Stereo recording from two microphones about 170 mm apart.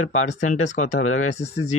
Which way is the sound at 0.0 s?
45° left (ahead or behind).